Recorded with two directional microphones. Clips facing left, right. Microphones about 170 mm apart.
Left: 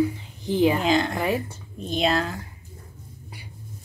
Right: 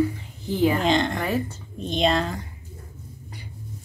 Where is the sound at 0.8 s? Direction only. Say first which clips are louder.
Even; 5° left (ahead or behind).